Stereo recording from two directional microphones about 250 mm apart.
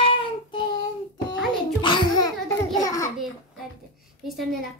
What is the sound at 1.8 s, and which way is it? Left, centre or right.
A child's voice, centre.